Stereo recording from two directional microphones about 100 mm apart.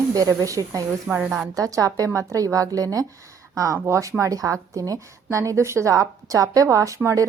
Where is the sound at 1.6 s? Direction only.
35° right (ahead or behind).